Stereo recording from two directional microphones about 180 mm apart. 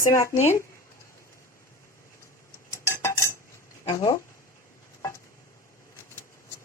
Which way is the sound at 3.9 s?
20° left (ahead or behind).